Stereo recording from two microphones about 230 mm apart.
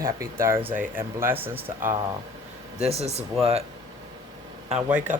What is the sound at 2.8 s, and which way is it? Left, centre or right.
Speech, right.